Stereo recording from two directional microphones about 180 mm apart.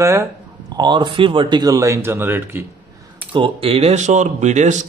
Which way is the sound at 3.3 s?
30° right (ahead or behind).